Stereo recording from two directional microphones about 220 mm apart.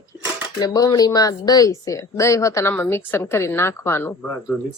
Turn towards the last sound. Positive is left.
turn(degrees=10)  # may be behind; listen again after turning